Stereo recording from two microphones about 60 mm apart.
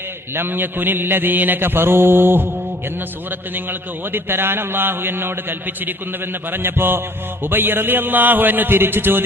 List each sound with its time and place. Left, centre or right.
0.3 s a man's voice: right
3.5 s a man's voice: right